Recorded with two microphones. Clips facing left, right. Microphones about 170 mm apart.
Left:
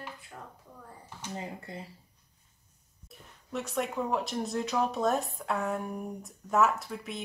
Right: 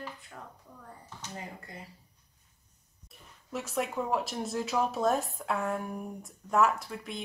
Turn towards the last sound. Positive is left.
turn(degrees=0)  # may be behind; listen again after turning